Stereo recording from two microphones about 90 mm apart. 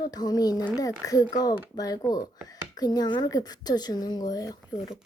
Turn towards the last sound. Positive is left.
turn(degrees=45)  # may be behind; listen again after turning